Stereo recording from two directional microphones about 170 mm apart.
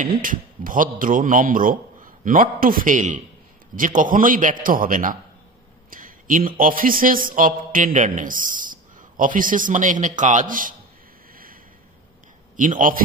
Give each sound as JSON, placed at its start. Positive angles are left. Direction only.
{"t": 0.0, "sound": "a man's voice", "side_deg": -55}
{"t": 5.9, "sound": "a sound", "side_deg": -55}
{"t": 6.6, "sound": "a man's voice", "side_deg": -55}
{"t": 12.5, "sound": "a man's voice", "side_deg": -50}